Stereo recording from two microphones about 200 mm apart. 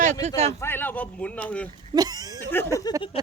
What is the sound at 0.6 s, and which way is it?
Speech, 10° left (ahead or behind).